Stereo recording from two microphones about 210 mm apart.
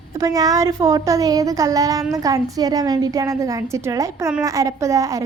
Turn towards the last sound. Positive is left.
turn(degrees=-15)  # may be behind; listen again after turning